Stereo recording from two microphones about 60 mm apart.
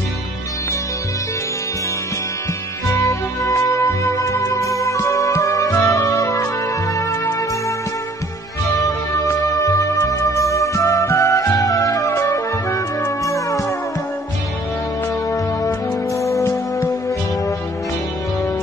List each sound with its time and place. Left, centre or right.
3.0 s music: left
8.7 s music: left
12.1 s music: left
15.3 s music: left